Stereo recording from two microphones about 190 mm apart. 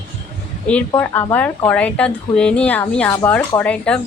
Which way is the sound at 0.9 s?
10° left (ahead or behind).